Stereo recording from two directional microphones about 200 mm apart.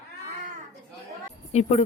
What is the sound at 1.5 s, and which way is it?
Speech, 35° left (ahead or behind).